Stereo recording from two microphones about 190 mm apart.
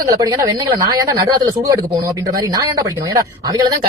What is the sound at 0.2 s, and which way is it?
Speech, 20° right (ahead or behind).